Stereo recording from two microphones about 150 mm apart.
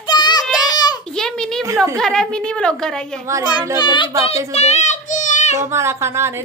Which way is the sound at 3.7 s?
30° left (ahead or behind).